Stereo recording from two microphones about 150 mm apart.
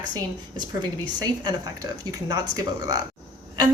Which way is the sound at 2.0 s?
25° right (ahead or behind).